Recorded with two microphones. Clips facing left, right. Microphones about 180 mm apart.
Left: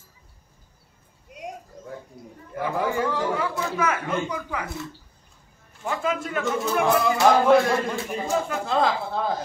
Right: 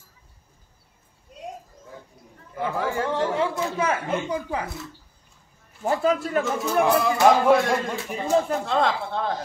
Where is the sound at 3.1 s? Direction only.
25° right (ahead or behind).